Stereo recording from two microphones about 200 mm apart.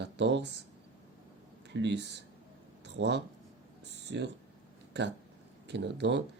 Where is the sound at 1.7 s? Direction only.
60° right (ahead or behind).